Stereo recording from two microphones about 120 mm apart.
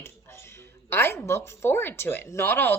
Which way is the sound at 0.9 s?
20° left (ahead or behind).